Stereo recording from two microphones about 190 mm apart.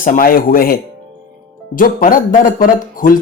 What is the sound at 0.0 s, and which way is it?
Speech, 45° left (ahead or behind).